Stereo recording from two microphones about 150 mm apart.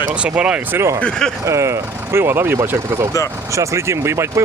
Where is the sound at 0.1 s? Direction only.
5° right (ahead or behind).